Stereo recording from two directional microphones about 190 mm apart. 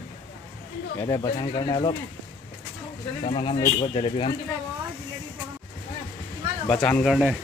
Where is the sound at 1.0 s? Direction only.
20° left (ahead or behind).